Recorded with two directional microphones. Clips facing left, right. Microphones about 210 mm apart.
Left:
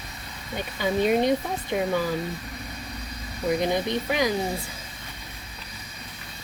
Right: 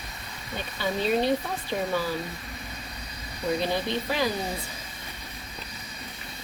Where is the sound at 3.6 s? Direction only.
15° left (ahead or behind).